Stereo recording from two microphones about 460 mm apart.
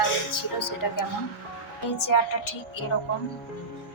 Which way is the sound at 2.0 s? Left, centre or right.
Left.